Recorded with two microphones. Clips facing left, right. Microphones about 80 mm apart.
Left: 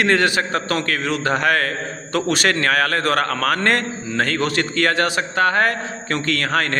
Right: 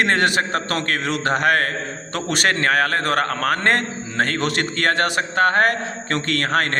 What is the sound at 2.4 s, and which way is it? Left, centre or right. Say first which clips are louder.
A man's voice: right 3 dB; right.